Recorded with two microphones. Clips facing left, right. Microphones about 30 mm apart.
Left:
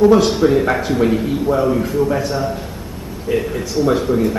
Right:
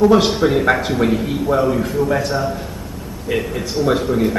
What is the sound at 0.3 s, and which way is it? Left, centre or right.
A woman's voice, centre.